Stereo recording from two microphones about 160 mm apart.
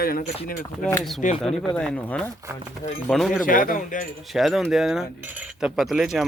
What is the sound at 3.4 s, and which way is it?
Speech, 60° left (ahead or behind).